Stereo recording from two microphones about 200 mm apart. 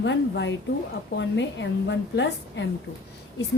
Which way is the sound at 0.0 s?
65° left (ahead or behind).